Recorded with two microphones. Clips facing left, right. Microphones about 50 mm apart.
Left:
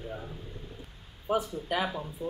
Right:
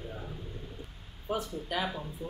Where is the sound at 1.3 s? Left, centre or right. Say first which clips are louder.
Left 4 dB; centre.